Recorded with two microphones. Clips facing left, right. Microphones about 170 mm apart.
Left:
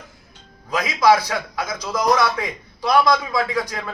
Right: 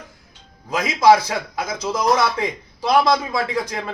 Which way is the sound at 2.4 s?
25° right (ahead or behind).